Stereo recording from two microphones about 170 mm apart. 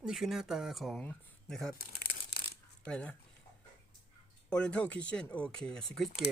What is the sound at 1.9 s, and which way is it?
Crumpling, 70° left (ahead or behind).